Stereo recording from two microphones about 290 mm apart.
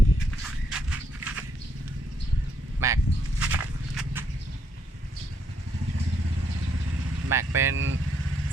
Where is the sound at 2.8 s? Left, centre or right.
Centre.